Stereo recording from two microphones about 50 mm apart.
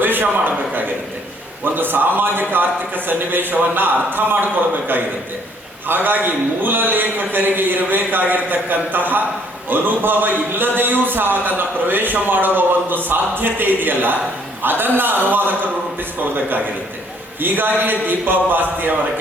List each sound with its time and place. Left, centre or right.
0.0 s a man's voice: right
17.4 s speech: right